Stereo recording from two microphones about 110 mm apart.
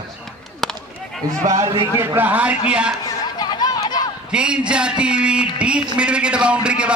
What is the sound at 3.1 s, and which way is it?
Chatter, 40° left (ahead or behind).